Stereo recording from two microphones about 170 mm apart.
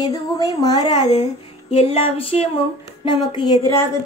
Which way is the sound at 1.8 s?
35° left (ahead or behind).